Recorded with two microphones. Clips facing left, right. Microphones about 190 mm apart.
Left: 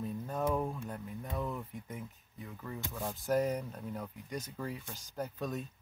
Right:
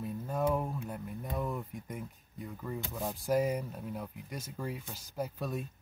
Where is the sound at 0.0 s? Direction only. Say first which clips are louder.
Right 2 dB; 5° right (ahead or behind).